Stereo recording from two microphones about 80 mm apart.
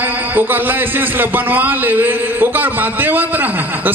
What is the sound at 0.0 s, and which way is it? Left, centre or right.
A man's voice, right.